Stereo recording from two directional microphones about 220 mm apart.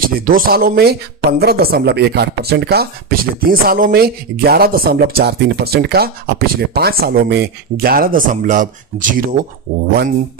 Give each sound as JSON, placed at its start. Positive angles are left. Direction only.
{"t": 0.0, "sound": "speech", "side_deg": -40}